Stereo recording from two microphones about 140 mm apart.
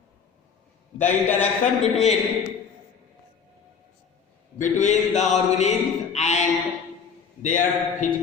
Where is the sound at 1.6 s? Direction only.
50° left (ahead or behind).